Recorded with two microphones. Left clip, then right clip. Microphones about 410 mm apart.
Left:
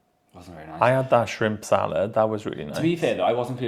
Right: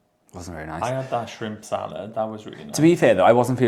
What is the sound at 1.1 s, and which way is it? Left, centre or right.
Speech, left.